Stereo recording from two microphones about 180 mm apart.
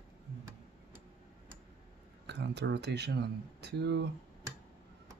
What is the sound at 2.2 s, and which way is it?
Speech, 70° right (ahead or behind).